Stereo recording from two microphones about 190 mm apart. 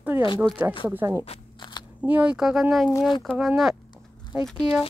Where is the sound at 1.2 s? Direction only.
30° left (ahead or behind).